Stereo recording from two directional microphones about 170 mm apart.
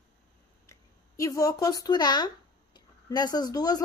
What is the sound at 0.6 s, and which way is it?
A woman's voice, 20° left (ahead or behind).